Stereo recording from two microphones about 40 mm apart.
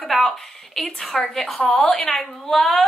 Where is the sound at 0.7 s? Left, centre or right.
Centre.